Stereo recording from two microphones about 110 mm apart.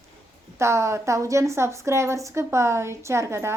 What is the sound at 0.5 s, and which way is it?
A woman's voice, 25° right (ahead or behind).